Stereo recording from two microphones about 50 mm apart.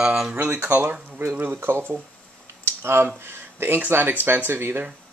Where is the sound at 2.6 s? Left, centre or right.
Right.